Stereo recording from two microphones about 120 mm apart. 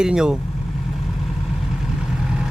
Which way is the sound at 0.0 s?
5° right (ahead or behind).